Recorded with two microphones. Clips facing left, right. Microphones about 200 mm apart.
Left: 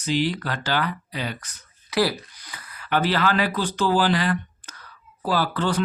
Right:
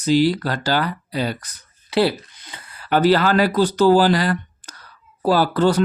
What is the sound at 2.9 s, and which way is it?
Speech, 40° right (ahead or behind).